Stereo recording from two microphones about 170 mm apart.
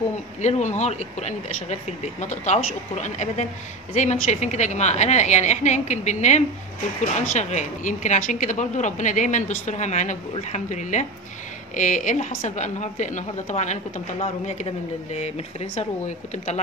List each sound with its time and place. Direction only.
0.4 s a woman's voice: 45° left (ahead or behind)